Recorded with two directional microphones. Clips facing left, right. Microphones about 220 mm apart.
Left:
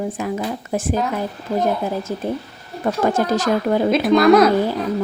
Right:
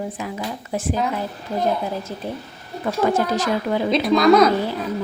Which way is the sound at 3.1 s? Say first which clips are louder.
Left 2 dB; 45° left (ahead or behind).